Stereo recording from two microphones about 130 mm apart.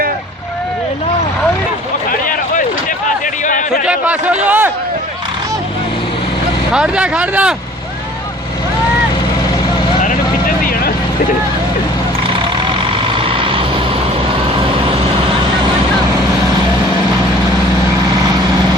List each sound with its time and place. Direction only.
2.0 s a sound: 90° left
3.8 s a man's voice: 10° right (ahead or behind)
6.7 s a man's voice: 5° right (ahead or behind)
13.1 s vehicle: 45° right (ahead or behind)